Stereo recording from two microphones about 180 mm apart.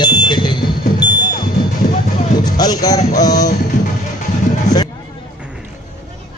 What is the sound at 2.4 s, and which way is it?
Speech, 20° left (ahead or behind).